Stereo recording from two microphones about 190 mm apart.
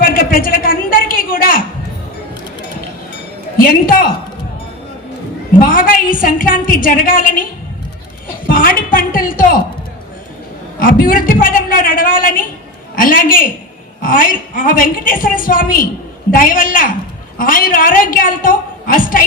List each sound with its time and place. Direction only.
0.0 s a sound: 50° left (ahead or behind)
5.6 s a woman's voice: 45° left (ahead or behind)
8.4 s a woman's voice: 50° left (ahead or behind)
10.8 s a woman's voice: 45° left (ahead or behind)